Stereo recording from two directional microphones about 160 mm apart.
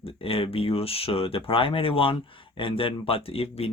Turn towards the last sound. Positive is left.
turn(degrees=40)  # may be behind; listen again after turning